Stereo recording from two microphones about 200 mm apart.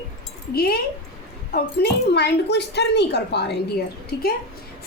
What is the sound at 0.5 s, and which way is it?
A child's voice, 50° left (ahead or behind).